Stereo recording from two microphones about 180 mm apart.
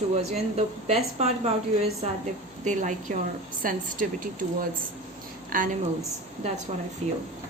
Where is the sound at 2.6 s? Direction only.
45° right (ahead or behind).